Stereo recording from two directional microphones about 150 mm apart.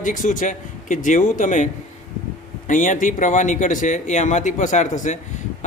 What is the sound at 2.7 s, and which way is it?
A man's voice, 60° left (ahead or behind).